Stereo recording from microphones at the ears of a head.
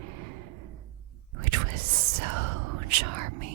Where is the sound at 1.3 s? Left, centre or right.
Right.